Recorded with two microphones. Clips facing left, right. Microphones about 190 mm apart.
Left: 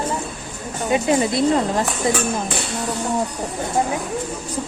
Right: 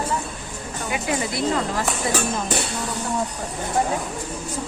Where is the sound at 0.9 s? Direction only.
30° left (ahead or behind).